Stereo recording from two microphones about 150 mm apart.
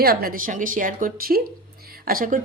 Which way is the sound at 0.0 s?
85° right.